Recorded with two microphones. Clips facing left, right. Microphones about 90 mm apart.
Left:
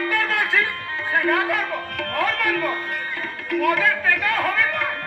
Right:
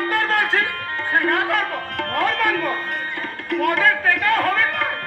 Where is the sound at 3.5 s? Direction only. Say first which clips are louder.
Right 1 dB; 50° right (ahead or behind).